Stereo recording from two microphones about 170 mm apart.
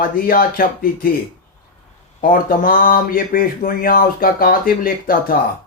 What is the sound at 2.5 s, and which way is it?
Speech, 60° left (ahead or behind).